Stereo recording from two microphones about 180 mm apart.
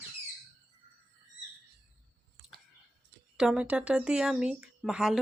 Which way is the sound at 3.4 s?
5° right (ahead or behind).